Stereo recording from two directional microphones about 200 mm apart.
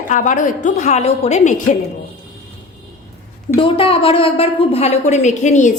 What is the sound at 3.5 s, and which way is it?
A woman's voice, 25° left (ahead or behind).